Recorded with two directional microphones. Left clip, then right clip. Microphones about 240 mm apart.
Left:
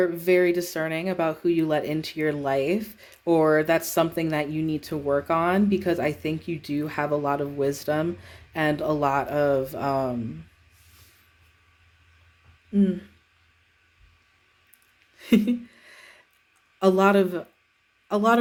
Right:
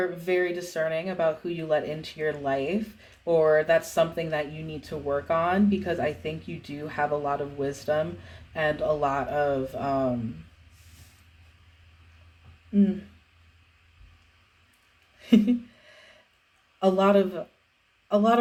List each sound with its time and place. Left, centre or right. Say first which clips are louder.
0.0 s speech: left 5 dB; left
15.2 s a sound: even; left
16.8 s speech: left 2 dB; left